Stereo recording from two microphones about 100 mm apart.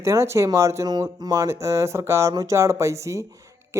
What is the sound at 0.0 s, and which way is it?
Speech, 30° right (ahead or behind).